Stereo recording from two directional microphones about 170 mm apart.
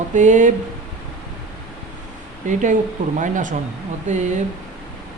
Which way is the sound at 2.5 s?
45° right (ahead or behind).